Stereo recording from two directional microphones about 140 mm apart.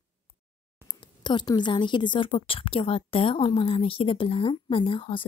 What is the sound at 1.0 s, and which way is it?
A woman's voice, 30° left (ahead or behind).